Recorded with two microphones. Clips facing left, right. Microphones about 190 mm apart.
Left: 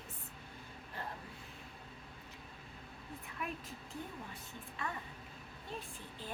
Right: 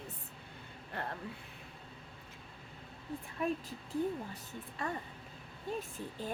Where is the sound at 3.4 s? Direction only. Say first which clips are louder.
Right 9 dB; 30° right (ahead or behind).